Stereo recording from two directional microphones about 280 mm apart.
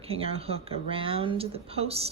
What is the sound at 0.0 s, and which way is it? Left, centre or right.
Speech, right.